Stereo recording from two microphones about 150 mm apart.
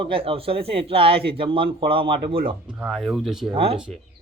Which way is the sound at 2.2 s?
85° right.